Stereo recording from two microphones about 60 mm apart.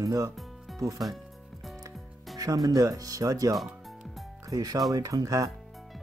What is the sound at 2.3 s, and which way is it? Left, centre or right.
Speech, right.